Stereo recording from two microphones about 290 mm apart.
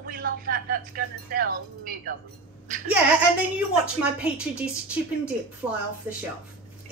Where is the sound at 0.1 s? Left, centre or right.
Right.